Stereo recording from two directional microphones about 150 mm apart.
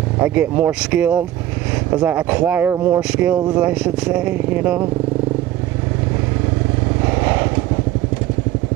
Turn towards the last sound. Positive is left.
turn(degrees=-10)  # may be behind; listen again after turning